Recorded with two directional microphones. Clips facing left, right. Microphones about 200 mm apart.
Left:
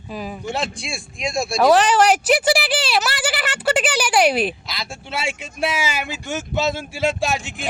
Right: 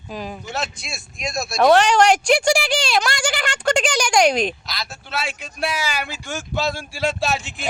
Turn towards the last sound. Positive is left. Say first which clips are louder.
# left 1 dB
turn(degrees=15)  # may be behind; listen again after turning